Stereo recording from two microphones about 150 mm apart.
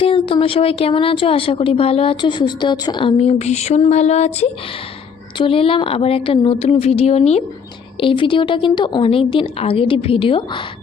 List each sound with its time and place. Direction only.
0.0 s speech: 40° left (ahead or behind)
7.9 s speech: 35° left (ahead or behind)